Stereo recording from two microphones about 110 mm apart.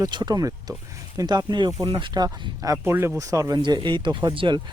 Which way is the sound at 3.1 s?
30° right (ahead or behind).